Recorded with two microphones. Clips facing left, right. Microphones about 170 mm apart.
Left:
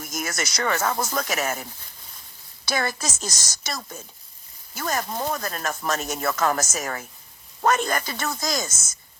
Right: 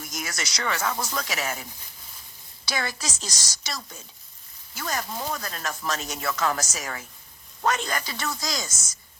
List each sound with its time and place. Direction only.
0.0 s speech: 50° left (ahead or behind)
2.6 s speech: 50° left (ahead or behind)